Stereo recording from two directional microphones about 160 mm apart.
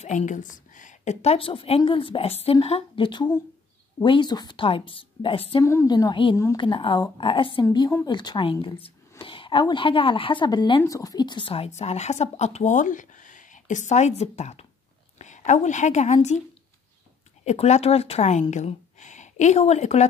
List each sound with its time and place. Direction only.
0.0 s a woman's voice: 50° left (ahead or behind); by 5.6 s 35° left (ahead or behind)
5.6 s speech: 20° left (ahead or behind)
6.3 s speech: 20° left (ahead or behind)
6.6 s a woman's voice: 30° left (ahead or behind); by 16.4 s 45° left (ahead or behind)
17.5 s speech: 45° left (ahead or behind)